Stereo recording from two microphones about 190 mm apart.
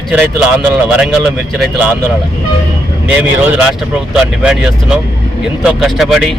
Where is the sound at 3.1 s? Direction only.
5° right (ahead or behind).